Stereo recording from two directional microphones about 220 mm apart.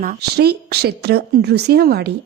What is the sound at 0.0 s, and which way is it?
A woman's voice, 45° right (ahead or behind).